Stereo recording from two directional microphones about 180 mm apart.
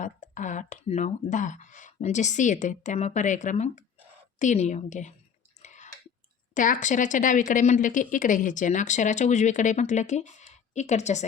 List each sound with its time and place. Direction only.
0.0 s speech: 45° left (ahead or behind)
5.6 s a sound: 40° left (ahead or behind)
6.5 s speech: 45° left (ahead or behind)